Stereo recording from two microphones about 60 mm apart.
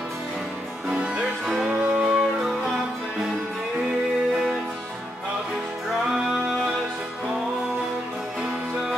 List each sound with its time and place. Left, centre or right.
0.8 s music: centre
1.4 s music: centre
1.7 s music: centre